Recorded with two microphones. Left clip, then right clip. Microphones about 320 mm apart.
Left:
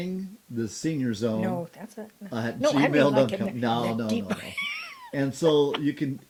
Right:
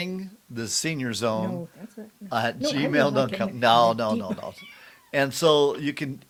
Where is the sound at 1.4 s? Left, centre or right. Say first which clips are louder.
Left 2 dB; left.